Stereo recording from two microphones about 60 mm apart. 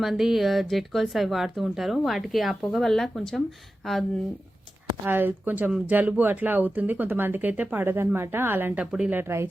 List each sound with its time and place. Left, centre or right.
0.0 s speech: centre
5.0 s speech: right
8.7 s speech: centre
9.0 s speech: right